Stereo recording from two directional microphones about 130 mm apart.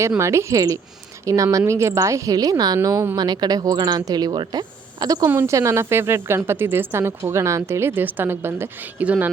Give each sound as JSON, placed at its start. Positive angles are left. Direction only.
{"t": 0.2, "sound": "speech", "side_deg": -20}